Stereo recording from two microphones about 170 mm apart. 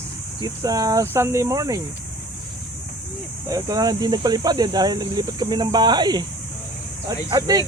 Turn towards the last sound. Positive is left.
turn(degrees=-20)  # may be behind; listen again after turning